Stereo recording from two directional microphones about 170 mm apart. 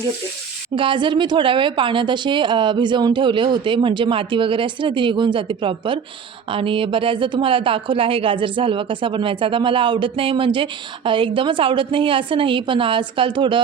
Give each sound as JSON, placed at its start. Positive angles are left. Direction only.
{"t": 0.8, "sound": "a woman's voice", "side_deg": -30}